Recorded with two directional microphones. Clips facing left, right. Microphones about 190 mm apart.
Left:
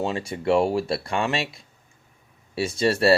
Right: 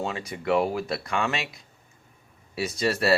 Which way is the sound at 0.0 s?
30° left (ahead or behind).